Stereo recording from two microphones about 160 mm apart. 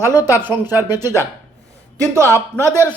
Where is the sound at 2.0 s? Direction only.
20° right (ahead or behind).